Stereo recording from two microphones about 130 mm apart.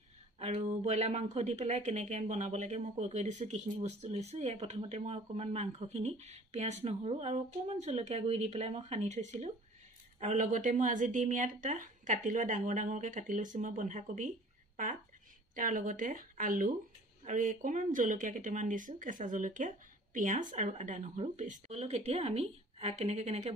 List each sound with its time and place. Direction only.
0.4 s speech: 55° right (ahead or behind); by 14.3 s 70° right (ahead or behind)
15.5 s speech: 80° right; by 23.5 s 55° right (ahead or behind)